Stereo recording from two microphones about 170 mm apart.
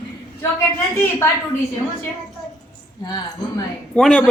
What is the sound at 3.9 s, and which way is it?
Speech, 5° left (ahead or behind).